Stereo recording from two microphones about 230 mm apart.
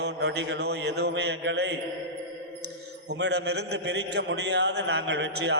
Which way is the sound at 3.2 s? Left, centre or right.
Right.